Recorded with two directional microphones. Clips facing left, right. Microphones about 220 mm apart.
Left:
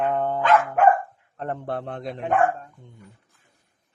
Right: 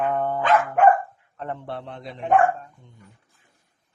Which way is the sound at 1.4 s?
45° left (ahead or behind).